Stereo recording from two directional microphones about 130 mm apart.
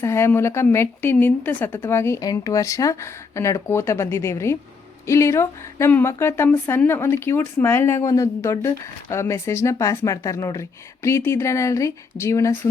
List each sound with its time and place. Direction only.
0.0 s speech: 20° left (ahead or behind)